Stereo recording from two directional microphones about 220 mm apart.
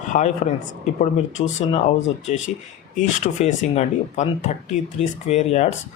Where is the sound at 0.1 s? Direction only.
35° left (ahead or behind).